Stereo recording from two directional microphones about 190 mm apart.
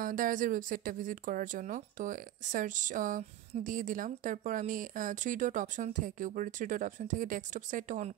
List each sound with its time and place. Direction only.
0.0 s speech: 45° right (ahead or behind)